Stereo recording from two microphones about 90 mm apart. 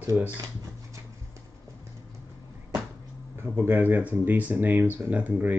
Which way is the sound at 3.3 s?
25° right (ahead or behind).